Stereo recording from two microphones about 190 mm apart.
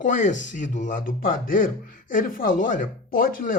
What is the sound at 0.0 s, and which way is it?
Speech, 40° left (ahead or behind).